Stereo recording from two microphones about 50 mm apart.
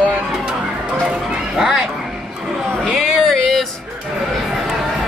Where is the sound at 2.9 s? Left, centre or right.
Centre.